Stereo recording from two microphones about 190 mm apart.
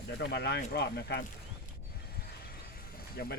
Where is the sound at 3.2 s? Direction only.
60° left (ahead or behind).